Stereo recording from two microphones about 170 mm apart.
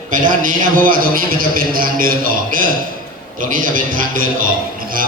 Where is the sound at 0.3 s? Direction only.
50° right (ahead or behind).